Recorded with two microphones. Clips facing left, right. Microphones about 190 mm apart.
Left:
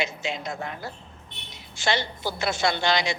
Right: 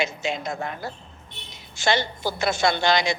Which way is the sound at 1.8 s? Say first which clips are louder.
Right 3 dB; 45° right (ahead or behind).